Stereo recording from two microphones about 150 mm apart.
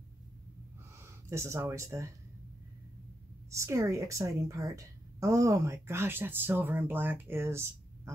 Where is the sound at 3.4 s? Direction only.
20° right (ahead or behind).